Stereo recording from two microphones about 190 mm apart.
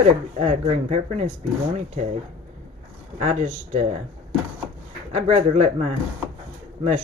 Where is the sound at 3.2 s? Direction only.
40° right (ahead or behind).